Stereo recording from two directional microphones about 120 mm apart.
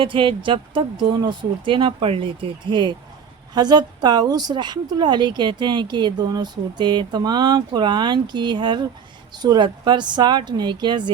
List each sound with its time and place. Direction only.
0.0 s a woman's voice: 45° right (ahead or behind)